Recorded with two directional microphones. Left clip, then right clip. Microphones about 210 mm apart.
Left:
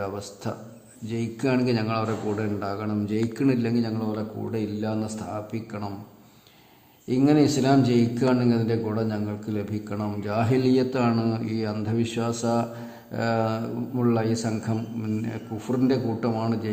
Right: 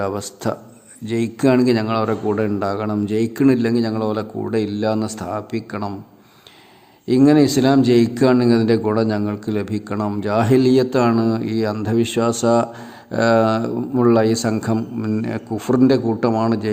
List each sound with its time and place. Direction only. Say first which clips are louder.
0.0 s a man's voice: right 9 dB; 40° right (ahead or behind)
7.1 s a man's voice: right 7 dB; 35° right (ahead or behind)